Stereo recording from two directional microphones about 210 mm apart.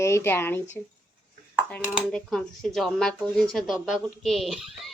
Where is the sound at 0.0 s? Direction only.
10° left (ahead or behind).